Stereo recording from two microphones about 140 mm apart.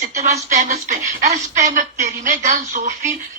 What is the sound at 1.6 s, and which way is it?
A woman's voice, 65° right (ahead or behind).